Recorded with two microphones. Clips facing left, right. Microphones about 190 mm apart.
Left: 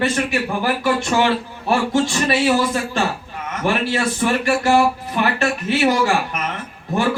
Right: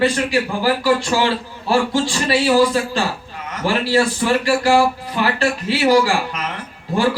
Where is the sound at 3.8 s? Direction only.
20° left (ahead or behind).